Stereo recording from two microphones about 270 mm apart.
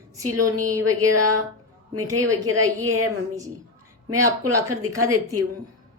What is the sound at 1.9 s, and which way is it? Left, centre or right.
A woman's voice, right.